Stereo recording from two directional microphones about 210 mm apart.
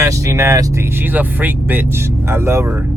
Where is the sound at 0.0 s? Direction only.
15° right (ahead or behind).